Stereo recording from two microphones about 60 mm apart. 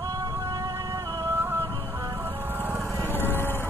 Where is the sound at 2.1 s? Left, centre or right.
Right.